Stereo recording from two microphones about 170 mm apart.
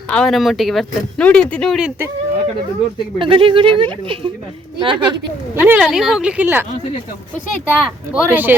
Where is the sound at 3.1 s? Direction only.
30° right (ahead or behind).